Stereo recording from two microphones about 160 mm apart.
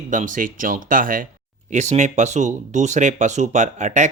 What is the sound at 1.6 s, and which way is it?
Speech, 45° right (ahead or behind).